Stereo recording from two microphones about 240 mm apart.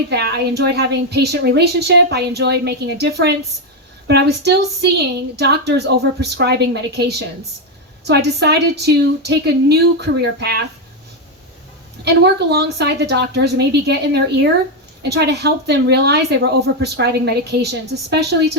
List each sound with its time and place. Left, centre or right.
0.1 s a woman's voice: right
12.0 s a woman's voice: right